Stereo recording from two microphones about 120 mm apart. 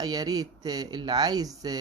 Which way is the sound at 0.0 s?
30° right (ahead or behind).